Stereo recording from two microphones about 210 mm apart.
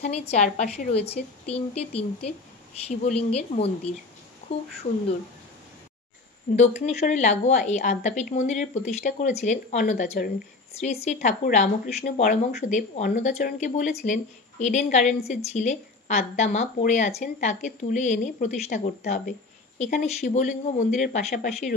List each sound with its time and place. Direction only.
0.0 s a woman's voice: 30° left (ahead or behind)
6.5 s speech: 30° left (ahead or behind)